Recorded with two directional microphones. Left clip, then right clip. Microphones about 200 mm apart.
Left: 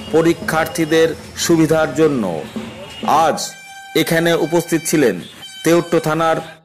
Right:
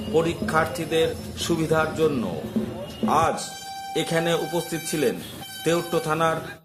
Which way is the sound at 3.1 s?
30° left (ahead or behind).